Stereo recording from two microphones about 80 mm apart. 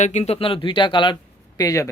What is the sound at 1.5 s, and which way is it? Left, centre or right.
Speech, left.